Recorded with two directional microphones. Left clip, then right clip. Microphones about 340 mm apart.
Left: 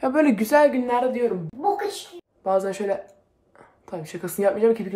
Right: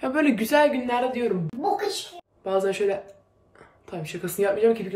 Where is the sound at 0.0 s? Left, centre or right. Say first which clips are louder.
Left 3 dB; centre.